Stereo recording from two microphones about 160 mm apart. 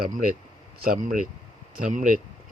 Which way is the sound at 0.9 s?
55° right (ahead or behind).